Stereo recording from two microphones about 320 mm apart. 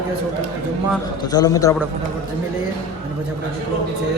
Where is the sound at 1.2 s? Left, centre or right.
Centre.